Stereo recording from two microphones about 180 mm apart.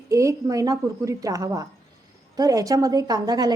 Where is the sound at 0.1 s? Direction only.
15° right (ahead or behind).